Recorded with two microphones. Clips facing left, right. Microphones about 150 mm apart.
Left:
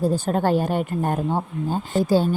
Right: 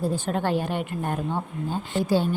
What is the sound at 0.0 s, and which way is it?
A woman's voice, 40° left (ahead or behind).